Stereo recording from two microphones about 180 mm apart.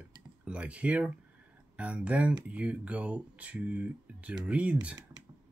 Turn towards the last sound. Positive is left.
turn(degrees=-5)  # may be behind; listen again after turning